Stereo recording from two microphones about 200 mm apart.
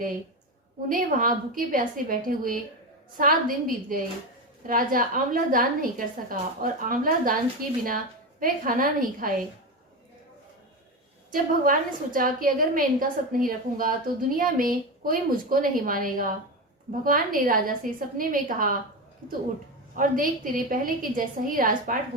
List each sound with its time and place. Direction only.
0.9 s a woman's voice: 45° right (ahead or behind)
11.3 s a woman's voice: 45° right (ahead or behind)
20.0 s a woman's voice: 45° right (ahead or behind)